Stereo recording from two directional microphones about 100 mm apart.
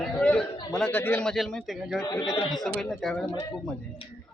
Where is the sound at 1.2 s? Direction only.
5° left (ahead or behind).